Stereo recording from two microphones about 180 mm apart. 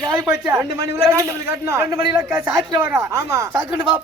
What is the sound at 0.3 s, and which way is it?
A man's voice, 15° right (ahead or behind).